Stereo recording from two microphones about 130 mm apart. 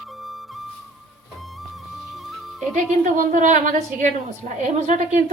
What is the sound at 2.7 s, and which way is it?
A woman's voice, 85° right.